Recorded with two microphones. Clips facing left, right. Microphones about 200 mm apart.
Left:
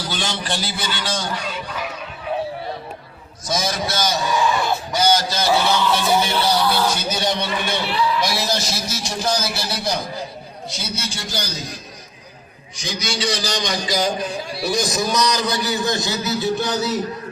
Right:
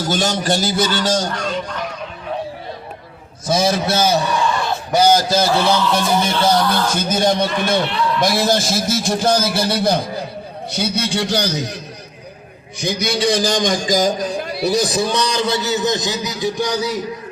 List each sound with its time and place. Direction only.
0.0 s a man's voice: 45° right (ahead or behind)
1.3 s speech: 5° left (ahead or behind)
4.3 s a sound: 5° left (ahead or behind)
4.9 s a man's voice: 50° right (ahead or behind)
5.5 s speech: 5° left (ahead or behind)
7.1 s a man's voice: 50° right (ahead or behind)
7.8 s speech: 5° left (ahead or behind)
8.2 s a man's voice: 50° right (ahead or behind)
14.4 s a man's voice: 60° right (ahead or behind)
14.7 s a man's voice: 30° right (ahead or behind); by 17.0 s 15° right (ahead or behind)